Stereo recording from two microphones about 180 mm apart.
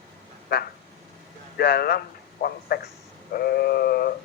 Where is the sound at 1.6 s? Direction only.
60° left (ahead or behind).